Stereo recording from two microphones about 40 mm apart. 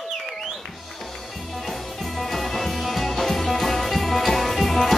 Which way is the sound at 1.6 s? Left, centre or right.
Centre.